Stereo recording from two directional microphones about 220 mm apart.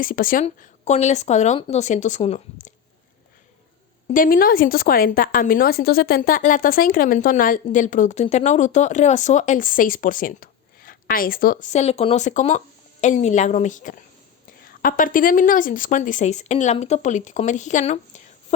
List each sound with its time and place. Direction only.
0.0 s a woman's voice: 40° left (ahead or behind)
4.1 s a woman's voice: 40° left (ahead or behind)